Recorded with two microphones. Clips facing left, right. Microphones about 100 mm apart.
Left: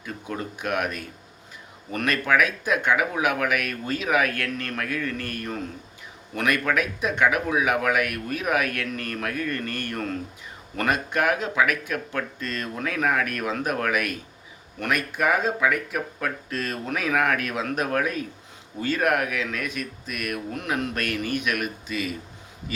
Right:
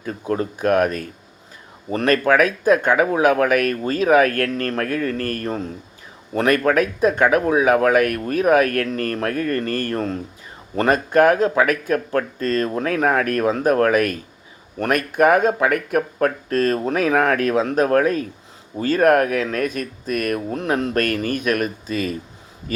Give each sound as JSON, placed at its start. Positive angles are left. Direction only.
{"t": 0.0, "sound": "speech", "side_deg": -40}